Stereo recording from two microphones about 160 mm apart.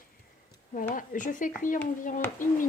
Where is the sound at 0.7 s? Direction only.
55° left (ahead or behind).